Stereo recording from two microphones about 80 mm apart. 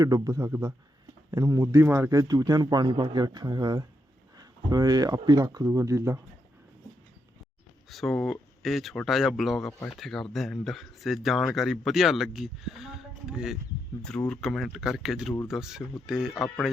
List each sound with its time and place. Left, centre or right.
0.0 s speech: right
2.0 s a man's voice: right
5.6 s speech: right
7.9 s speech: centre
14.3 s speech: centre